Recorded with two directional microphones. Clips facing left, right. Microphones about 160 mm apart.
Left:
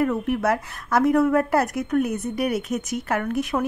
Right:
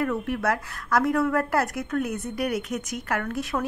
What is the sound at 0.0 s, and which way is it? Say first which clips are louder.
A woman's voice: left 4 dB; 20° left (ahead or behind).